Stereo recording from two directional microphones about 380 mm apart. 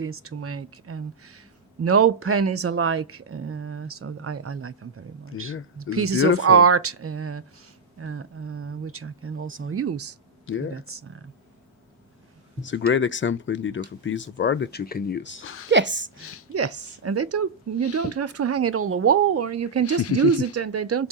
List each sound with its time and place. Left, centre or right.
0.0 s a woman's voice: right
5.3 s speech: left
5.7 s a woman's voice: right
10.4 s speech: left
12.6 s speech: left
15.7 s a woman's voice: right